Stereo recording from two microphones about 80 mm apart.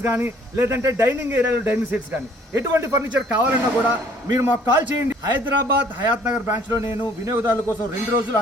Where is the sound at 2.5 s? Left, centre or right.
Right.